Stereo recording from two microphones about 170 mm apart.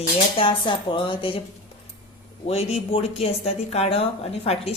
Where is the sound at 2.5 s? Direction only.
40° left (ahead or behind).